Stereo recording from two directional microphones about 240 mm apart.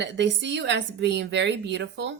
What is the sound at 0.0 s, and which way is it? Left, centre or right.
Speech, right.